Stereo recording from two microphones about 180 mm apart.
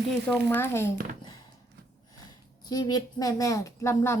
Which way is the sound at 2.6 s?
20° left (ahead or behind).